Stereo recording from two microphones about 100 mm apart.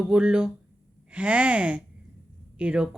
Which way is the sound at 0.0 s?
10° right (ahead or behind).